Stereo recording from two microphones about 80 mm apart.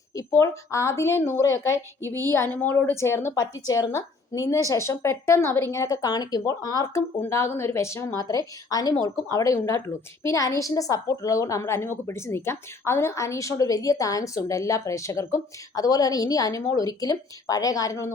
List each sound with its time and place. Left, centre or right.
0.3 s a woman's voice: left
3.3 s a woman's voice: left
5.9 s a woman's voice: left
8.2 s a woman's voice: left
15.8 s a woman's voice: left